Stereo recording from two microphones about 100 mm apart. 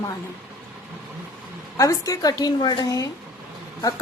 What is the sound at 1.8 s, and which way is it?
Speech, 35° left (ahead or behind).